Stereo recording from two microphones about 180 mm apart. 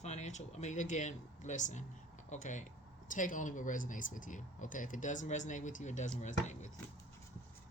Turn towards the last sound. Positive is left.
turn(degrees=40)  # may be behind; listen again after turning